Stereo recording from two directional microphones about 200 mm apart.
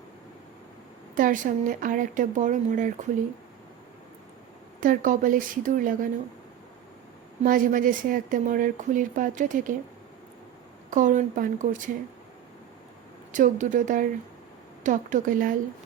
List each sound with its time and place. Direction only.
1.1 s speech: 40° right (ahead or behind)
4.8 s speech: 40° right (ahead or behind)
7.4 s speech: 45° right (ahead or behind)
10.9 s speech: 40° right (ahead or behind)
13.3 s speech: 40° right (ahead or behind)